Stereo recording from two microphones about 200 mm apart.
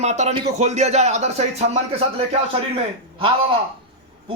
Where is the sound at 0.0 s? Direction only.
35° right (ahead or behind).